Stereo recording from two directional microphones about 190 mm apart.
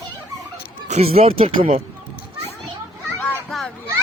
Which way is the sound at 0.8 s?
35° right (ahead or behind).